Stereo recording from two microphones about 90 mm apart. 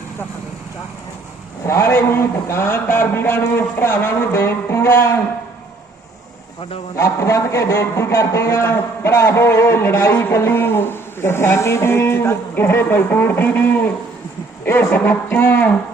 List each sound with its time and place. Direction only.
1.6 s a man's voice: 30° left (ahead or behind)
6.9 s a man's voice: 35° left (ahead or behind)